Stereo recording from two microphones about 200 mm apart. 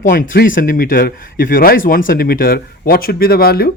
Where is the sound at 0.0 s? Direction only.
45° left (ahead or behind).